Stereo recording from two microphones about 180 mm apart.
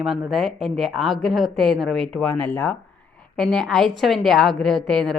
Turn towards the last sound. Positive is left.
turn(degrees=0)  # may be behind; listen again after turning